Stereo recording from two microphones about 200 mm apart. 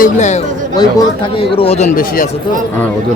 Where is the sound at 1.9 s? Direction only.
45° left (ahead or behind).